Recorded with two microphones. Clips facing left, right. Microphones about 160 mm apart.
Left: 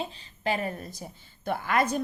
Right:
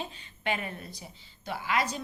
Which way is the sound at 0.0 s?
35° left (ahead or behind).